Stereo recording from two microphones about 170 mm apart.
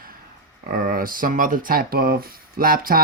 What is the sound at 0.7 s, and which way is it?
Speech, 55° right (ahead or behind).